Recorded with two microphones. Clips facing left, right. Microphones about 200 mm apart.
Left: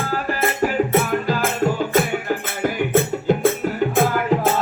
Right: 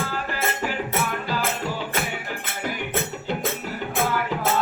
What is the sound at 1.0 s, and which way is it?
Music, 45° left (ahead or behind).